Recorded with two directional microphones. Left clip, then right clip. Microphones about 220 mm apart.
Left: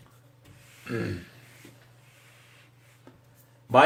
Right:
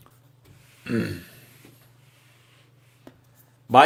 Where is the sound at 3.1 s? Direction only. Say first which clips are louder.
Right 5 dB; 45° right (ahead or behind).